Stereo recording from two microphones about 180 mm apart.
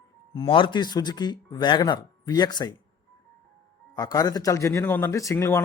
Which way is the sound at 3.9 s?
20° left (ahead or behind).